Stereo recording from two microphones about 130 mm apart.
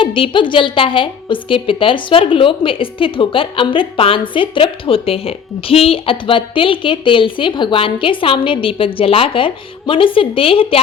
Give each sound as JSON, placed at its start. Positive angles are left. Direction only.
{"t": 0.0, "sound": "a woman's voice", "side_deg": 40}